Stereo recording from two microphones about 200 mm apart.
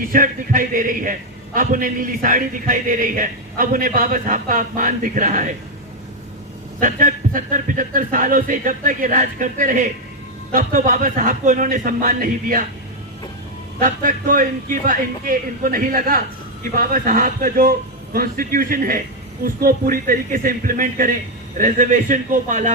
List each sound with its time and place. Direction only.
0.0 s a man's voice: 45° right (ahead or behind)
6.7 s a man's voice: 40° right (ahead or behind)
13.7 s a man's voice: 40° right (ahead or behind)